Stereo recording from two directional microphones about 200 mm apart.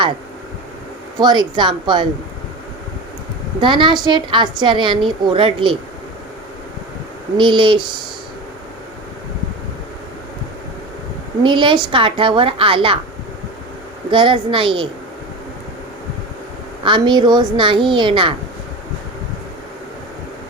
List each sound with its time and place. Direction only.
1.2 s a woman's voice: 20° right (ahead or behind)
3.6 s a woman's voice: 25° right (ahead or behind)
7.3 s a woman's voice: 25° right (ahead or behind)
11.4 s a woman's voice: 25° right (ahead or behind)
14.1 s a woman's voice: 25° right (ahead or behind)
16.8 s a woman's voice: 25° right (ahead or behind)